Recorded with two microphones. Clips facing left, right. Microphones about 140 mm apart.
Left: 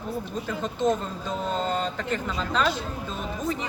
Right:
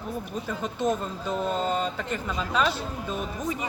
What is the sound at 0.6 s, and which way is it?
Speech, 10° right (ahead or behind).